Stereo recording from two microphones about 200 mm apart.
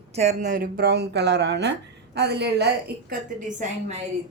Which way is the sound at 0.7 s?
55° right (ahead or behind).